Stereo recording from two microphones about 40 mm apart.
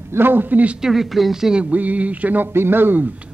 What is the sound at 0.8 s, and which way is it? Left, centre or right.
Speech, centre.